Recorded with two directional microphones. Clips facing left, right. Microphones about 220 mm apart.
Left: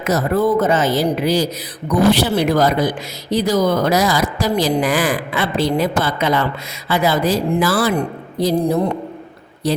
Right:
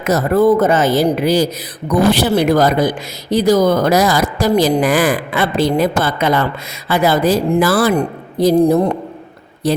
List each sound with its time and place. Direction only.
0.0 s speech: 50° right (ahead or behind)
9.6 s speech: 50° right (ahead or behind)